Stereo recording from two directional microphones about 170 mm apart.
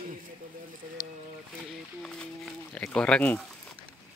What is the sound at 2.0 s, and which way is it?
Speech, 5° left (ahead or behind).